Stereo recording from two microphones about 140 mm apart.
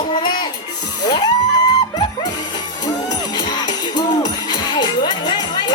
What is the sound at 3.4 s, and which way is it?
Music, 30° left (ahead or behind).